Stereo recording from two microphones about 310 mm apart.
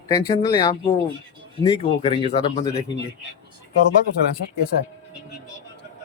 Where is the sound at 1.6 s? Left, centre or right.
Centre.